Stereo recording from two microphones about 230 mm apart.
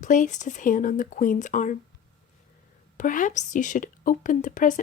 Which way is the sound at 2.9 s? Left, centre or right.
Left.